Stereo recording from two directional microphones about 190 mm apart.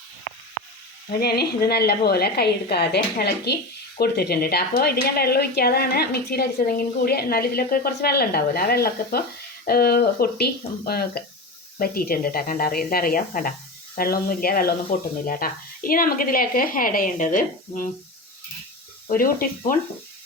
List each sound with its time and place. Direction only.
1.1 s a woman's voice: 55° left (ahead or behind)
19.0 s speech: 50° left (ahead or behind)